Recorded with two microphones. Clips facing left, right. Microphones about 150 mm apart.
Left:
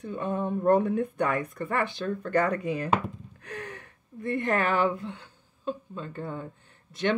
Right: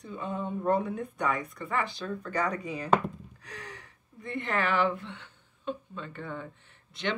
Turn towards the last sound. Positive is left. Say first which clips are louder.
# left 6 dB
turn(degrees=45)  # may be behind; listen again after turning